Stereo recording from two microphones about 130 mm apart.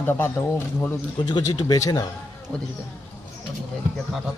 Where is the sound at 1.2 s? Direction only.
35° left (ahead or behind).